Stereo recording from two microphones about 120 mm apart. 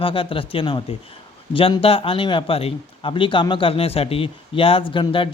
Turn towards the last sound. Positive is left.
turn(degrees=45)  # may be behind; listen again after turning